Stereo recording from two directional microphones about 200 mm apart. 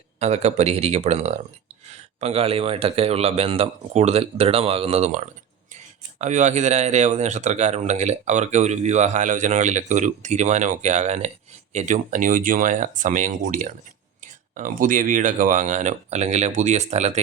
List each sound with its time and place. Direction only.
0.2 s speech: 35° right (ahead or behind)